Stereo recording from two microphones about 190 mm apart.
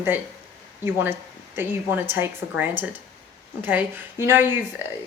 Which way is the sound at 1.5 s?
10° right (ahead or behind).